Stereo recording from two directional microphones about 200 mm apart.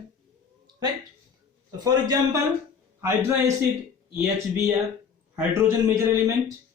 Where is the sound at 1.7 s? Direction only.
20° right (ahead or behind).